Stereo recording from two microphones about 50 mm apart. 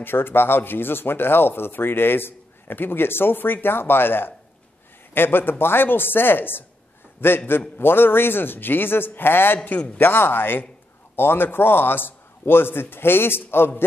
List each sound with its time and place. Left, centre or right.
0.0 s speech: left